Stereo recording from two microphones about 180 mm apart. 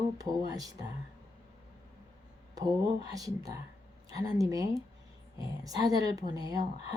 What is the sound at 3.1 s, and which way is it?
Speech, 20° right (ahead or behind).